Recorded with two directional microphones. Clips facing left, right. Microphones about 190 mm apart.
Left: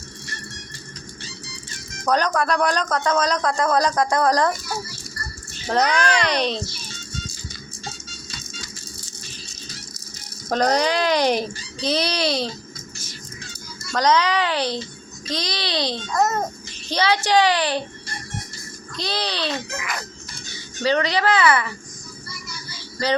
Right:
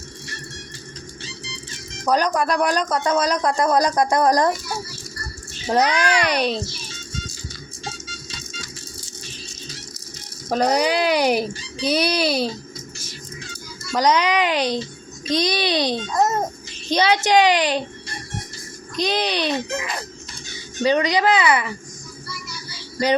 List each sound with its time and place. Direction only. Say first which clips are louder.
2.0 s a man's voice: right 1 dB; 10° right (ahead or behind)
5.6 s a man's voice: right 1 dB; 10° right (ahead or behind)
10.5 s a man's voice: right 1 dB; 5° right (ahead or behind)
13.9 s a man's voice: right 1 dB; 15° right (ahead or behind)
16.1 s a child's voice: left 1 dB; 30° right (ahead or behind)
18.9 s a man's voice: right 5 dB; 15° right (ahead or behind)